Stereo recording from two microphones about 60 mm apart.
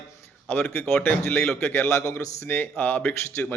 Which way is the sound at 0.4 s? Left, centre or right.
Left.